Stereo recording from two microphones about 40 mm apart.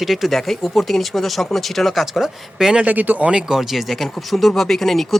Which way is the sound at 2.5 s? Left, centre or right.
Centre.